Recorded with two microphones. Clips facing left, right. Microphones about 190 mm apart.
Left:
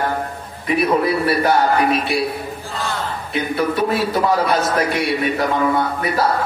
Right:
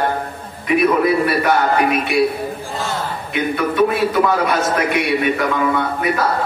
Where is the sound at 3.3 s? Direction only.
30° left (ahead or behind).